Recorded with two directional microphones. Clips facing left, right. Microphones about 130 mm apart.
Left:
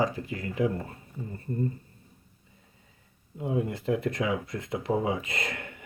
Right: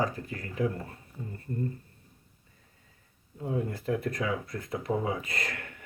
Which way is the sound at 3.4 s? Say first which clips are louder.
Left 3 dB; 15° left (ahead or behind).